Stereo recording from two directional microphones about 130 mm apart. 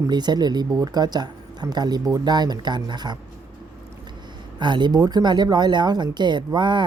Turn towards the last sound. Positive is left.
turn(degrees=-35)  # may be behind; listen again after turning